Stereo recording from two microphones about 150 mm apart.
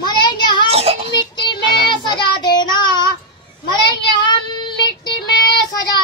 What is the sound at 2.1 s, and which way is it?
Speech, 30° left (ahead or behind).